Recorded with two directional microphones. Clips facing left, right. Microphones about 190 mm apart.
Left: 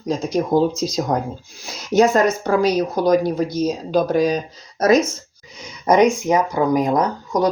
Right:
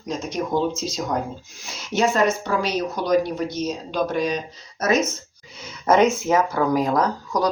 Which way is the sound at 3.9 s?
40° left (ahead or behind).